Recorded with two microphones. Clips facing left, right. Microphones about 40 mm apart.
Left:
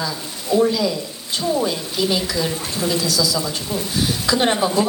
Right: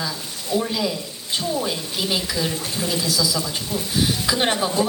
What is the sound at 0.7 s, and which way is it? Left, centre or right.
Speech, right.